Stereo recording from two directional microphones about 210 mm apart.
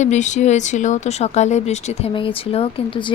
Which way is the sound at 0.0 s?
35° left (ahead or behind).